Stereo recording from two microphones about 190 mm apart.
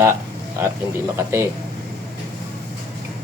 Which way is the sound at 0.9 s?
15° right (ahead or behind).